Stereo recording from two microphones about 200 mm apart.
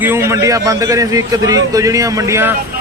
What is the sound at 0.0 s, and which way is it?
A man's voice, 10° right (ahead or behind).